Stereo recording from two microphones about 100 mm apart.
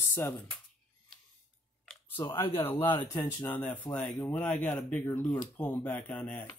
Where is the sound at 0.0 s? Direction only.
25° left (ahead or behind).